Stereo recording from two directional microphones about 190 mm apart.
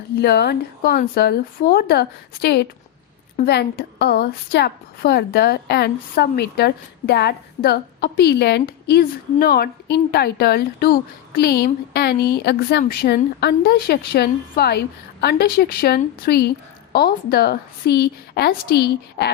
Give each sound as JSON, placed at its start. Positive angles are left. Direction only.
{"t": 0.2, "sound": "a woman's voice", "side_deg": 55}